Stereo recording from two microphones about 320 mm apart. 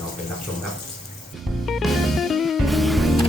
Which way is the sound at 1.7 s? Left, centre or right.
Centre.